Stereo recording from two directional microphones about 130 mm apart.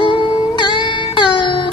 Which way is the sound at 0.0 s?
35° left (ahead or behind).